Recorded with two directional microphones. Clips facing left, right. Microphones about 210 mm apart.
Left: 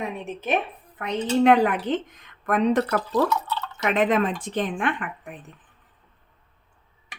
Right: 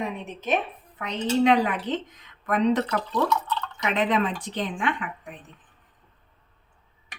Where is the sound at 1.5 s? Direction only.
55° left (ahead or behind).